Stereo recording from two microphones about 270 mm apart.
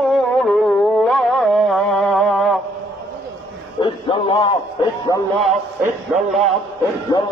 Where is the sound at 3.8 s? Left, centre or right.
Centre.